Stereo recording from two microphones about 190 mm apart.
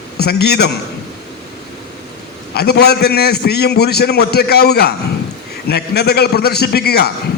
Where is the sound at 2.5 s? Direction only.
55° left (ahead or behind).